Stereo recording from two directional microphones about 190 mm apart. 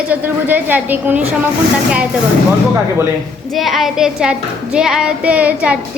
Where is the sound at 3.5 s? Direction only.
Centre (ahead or behind).